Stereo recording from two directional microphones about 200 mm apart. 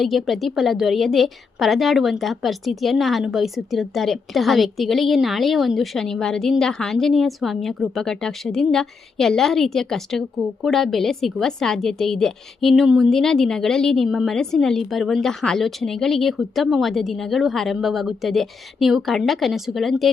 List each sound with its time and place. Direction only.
0.0 s a woman's voice: centre (ahead or behind)